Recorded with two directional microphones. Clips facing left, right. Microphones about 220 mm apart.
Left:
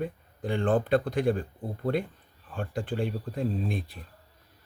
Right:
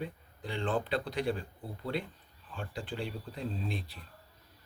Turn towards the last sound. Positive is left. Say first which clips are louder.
# left 6 dB
turn(degrees=50)  # may be behind; listen again after turning